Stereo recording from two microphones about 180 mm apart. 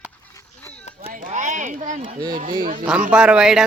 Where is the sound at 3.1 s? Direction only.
5° right (ahead or behind).